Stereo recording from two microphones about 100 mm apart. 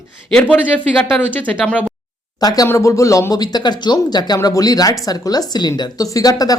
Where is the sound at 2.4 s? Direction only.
40° left (ahead or behind).